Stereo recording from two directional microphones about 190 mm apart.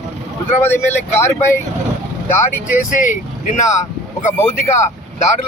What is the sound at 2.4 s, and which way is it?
Speech, 40° left (ahead or behind).